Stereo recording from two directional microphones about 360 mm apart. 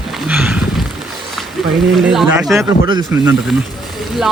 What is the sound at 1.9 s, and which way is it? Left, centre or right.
Speech, centre.